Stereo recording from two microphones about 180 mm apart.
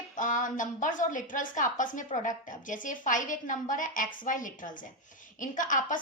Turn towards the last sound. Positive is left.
turn(degrees=45)  # may be behind; listen again after turning